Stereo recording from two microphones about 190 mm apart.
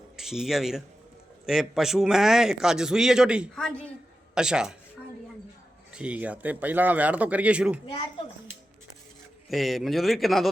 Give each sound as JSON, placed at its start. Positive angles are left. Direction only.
{"t": 0.2, "sound": "a man's voice", "side_deg": 0}
{"t": 5.9, "sound": "speech", "side_deg": -5}
{"t": 9.5, "sound": "a man's voice", "side_deg": 0}